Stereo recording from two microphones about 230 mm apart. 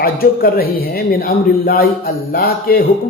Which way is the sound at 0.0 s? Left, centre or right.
Left.